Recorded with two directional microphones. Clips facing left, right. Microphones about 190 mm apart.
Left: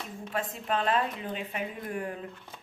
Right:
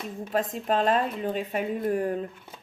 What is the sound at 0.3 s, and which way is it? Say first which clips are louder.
Speech: right 6 dB; 40° right (ahead or behind).